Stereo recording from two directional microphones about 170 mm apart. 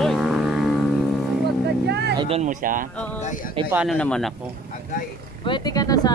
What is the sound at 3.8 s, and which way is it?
Speech, 5° left (ahead or behind).